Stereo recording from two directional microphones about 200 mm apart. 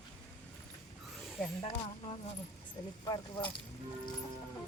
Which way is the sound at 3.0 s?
20° left (ahead or behind).